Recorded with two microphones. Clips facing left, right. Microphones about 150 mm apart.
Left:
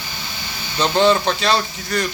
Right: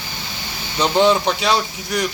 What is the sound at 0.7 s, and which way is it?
Speech, 10° right (ahead or behind).